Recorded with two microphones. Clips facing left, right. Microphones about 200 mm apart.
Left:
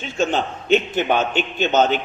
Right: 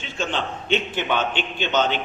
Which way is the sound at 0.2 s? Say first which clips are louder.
Left 6 dB; 45° left (ahead or behind).